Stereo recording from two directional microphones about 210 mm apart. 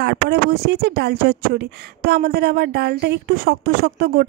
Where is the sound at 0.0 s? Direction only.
50° right (ahead or behind).